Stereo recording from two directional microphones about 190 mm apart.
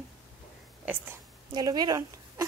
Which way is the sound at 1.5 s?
20° right (ahead or behind).